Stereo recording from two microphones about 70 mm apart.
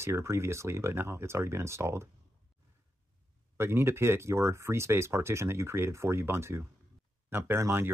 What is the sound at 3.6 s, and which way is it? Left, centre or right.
Speech, right.